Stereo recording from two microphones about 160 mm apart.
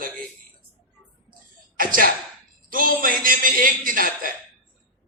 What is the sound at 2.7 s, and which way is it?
A man's voice, 60° right (ahead or behind).